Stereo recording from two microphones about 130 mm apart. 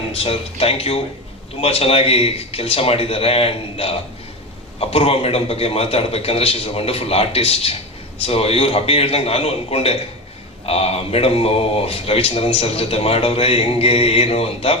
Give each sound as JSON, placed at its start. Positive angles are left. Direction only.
{"t": 0.1, "sound": "speech", "side_deg": 50}